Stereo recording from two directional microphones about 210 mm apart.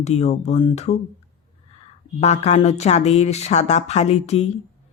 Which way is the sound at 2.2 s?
30° left (ahead or behind).